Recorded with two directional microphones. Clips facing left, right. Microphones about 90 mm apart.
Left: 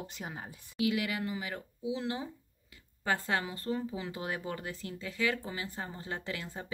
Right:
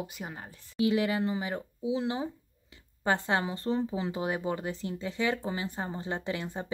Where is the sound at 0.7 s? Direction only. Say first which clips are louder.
Right 5 dB; 30° right (ahead or behind).